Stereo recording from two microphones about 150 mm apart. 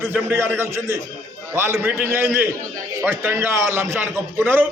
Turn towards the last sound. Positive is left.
turn(degrees=-15)  # may be behind; listen again after turning